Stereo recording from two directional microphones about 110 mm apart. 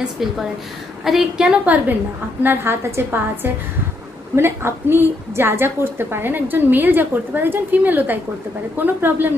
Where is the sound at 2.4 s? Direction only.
25° right (ahead or behind).